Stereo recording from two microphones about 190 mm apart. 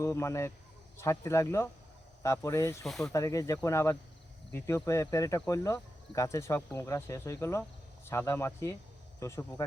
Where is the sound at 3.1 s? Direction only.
15° left (ahead or behind).